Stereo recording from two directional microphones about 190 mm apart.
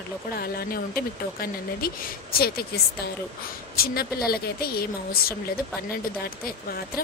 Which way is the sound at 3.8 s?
55° left (ahead or behind).